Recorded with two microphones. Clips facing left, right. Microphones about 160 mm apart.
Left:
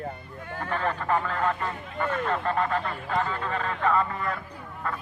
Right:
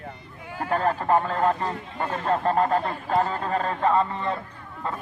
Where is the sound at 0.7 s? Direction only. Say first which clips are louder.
Right 5 dB; 35° right (ahead or behind).